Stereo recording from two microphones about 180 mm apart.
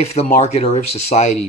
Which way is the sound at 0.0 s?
35° left (ahead or behind).